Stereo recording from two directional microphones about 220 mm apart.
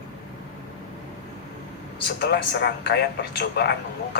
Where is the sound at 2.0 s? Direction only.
50° left (ahead or behind).